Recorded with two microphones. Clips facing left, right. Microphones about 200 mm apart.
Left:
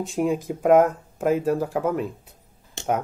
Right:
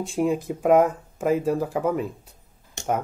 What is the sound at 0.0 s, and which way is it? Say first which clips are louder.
Speech: even; centre (ahead or behind).